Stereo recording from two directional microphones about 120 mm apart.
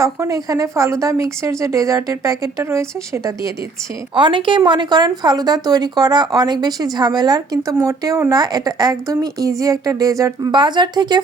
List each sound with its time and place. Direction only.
0.0 s speech: 30° right (ahead or behind)
4.1 s speech: 40° right (ahead or behind)
10.5 s speech: 40° right (ahead or behind)